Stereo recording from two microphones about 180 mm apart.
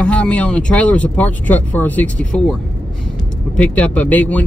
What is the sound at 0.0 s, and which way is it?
Speech, 5° left (ahead or behind).